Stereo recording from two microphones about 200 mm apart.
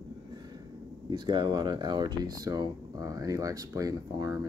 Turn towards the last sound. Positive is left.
turn(degrees=-15)  # may be behind; listen again after turning